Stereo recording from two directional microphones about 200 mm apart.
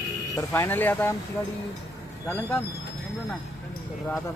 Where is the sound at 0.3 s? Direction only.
15° left (ahead or behind).